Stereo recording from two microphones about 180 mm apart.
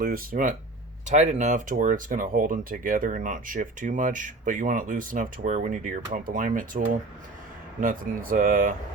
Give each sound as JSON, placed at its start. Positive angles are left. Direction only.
{"t": 0.0, "sound": "speech", "side_deg": -50}